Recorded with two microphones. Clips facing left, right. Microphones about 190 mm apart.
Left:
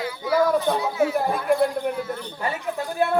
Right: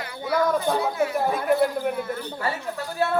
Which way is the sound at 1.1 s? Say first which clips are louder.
Even; centre (ahead or behind).